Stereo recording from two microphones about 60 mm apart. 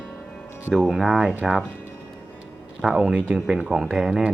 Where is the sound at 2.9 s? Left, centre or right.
Centre.